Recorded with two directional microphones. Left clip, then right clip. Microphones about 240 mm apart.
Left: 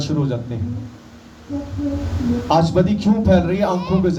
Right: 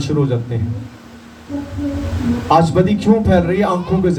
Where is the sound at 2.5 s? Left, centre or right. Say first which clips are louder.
Right 4 dB; centre.